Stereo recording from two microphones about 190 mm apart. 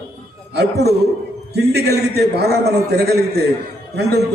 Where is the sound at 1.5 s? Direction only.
60° right (ahead or behind).